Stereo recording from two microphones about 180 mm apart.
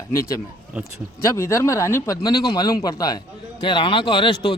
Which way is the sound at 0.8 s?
5° right (ahead or behind).